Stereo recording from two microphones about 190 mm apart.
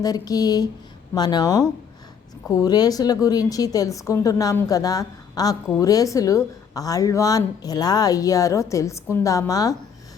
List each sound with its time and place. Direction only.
0.0 s a woman's voice: 20° left (ahead or behind)